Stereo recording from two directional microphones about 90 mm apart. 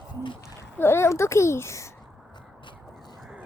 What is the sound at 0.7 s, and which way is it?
Speech, 30° left (ahead or behind).